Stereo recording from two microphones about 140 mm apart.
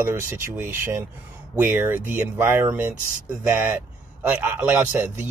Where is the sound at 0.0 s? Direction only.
15° right (ahead or behind).